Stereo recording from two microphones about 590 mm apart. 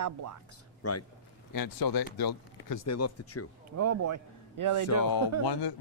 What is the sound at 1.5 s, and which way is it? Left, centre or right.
Speech, left.